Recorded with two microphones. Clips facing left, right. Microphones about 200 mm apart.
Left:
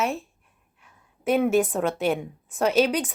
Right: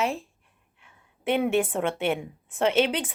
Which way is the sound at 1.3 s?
40° left (ahead or behind).